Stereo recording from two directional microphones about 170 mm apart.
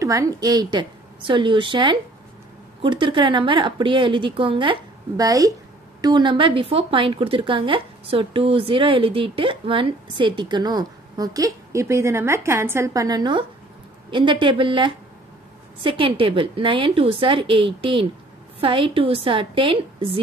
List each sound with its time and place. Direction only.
0.0 s a woman's voice: 20° right (ahead or behind)